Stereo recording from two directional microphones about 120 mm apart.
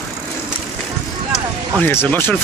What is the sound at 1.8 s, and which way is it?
Speech, 15° left (ahead or behind).